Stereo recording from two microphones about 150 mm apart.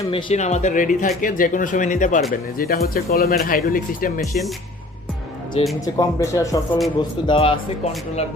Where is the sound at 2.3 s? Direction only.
90° left.